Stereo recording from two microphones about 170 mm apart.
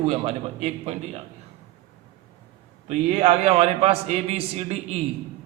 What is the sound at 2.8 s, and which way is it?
A man's voice, 40° right (ahead or behind).